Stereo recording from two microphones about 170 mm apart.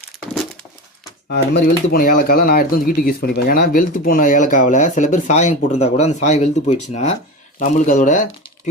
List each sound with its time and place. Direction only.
1.3 s speech: 70° left (ahead or behind); by 8.3 s 50° left (ahead or behind)